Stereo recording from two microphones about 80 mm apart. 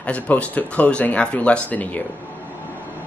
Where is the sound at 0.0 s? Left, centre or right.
Centre.